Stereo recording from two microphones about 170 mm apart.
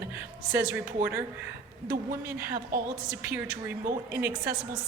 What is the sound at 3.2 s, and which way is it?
A woman's voice, 10° right (ahead or behind).